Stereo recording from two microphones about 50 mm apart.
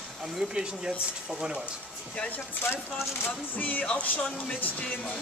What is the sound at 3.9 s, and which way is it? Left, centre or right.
Speech, left.